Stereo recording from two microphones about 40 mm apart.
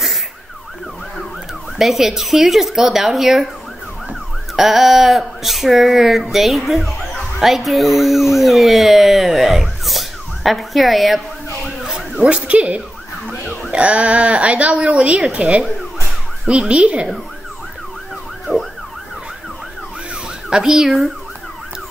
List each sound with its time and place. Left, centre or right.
1.8 s ambulance: centre
7.3 s speech: centre
11.8 s a sound: centre
12.2 s a woman's voice: right
16.4 s speech: right
18.5 s emergency vehicle: left
20.4 s ambulance: centre